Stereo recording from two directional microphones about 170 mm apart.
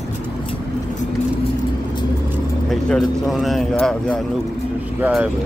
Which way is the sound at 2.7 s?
Centre (ahead or behind).